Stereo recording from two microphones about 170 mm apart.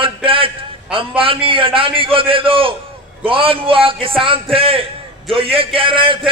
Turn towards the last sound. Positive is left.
turn(degrees=-30)  # may be behind; listen again after turning